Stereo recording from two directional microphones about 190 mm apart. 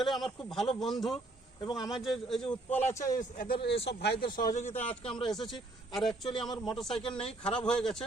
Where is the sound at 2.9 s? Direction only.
15° left (ahead or behind).